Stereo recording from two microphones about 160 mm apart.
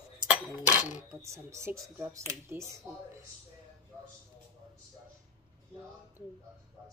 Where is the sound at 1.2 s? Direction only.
20° right (ahead or behind).